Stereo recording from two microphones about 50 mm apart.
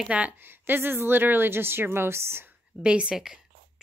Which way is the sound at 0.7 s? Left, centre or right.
Right.